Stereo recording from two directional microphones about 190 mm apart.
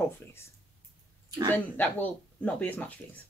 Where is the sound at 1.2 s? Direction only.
20° right (ahead or behind).